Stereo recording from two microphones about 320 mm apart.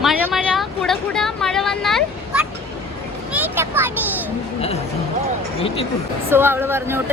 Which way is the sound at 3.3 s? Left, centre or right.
Centre.